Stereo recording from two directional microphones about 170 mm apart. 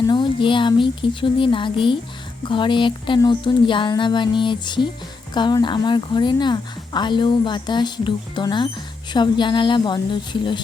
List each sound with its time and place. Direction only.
0.1 s a woman's voice: 30° left (ahead or behind)